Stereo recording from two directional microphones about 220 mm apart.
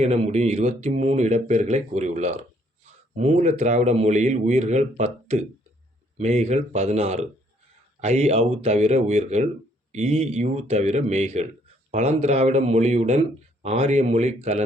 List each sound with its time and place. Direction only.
0.0 s a man's voice: 30° right (ahead or behind)